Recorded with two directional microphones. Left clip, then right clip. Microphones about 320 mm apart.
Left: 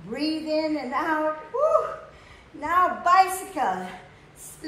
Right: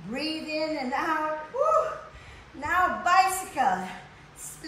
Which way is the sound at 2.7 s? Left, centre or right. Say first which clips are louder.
Left 3 dB; centre.